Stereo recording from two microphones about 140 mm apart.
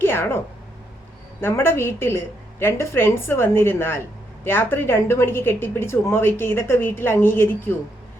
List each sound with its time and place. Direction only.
0.0 s a woman's voice: 15° left (ahead or behind)
1.4 s a woman's voice: 15° left (ahead or behind)